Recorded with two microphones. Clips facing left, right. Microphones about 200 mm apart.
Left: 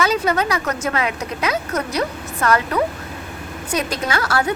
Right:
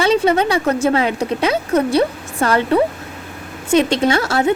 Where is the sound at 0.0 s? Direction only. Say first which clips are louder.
Right 5 dB; 30° right (ahead or behind).